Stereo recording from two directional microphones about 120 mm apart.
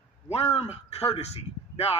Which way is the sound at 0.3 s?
60° left (ahead or behind).